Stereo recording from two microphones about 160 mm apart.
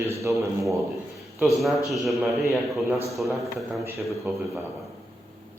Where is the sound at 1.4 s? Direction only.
Centre (ahead or behind).